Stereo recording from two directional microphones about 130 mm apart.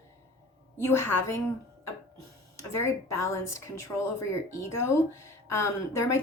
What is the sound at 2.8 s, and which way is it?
Speech, 20° left (ahead or behind).